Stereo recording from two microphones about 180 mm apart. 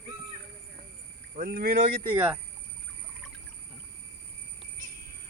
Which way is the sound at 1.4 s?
60° right (ahead or behind).